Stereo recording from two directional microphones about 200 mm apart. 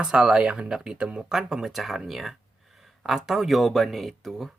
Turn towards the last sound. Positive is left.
turn(degrees=0)  # may be behind; listen again after turning